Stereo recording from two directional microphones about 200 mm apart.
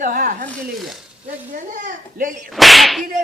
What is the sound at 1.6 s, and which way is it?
Speech, 40° right (ahead or behind).